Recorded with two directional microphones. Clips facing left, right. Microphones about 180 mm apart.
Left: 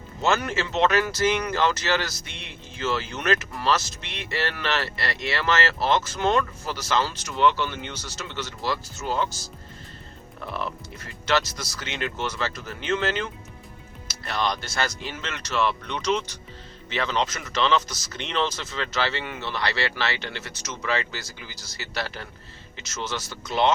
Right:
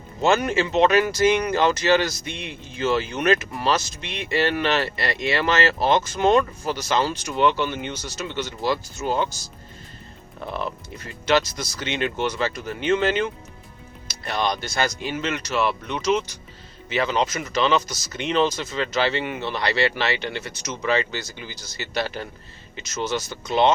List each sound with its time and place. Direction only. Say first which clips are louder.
0.2 s speech: right 4 dB; 15° right (ahead or behind)
10.4 s speech: right 3 dB; 20° right (ahead or behind)